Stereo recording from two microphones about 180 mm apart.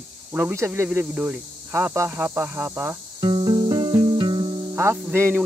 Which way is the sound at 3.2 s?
25° right (ahead or behind).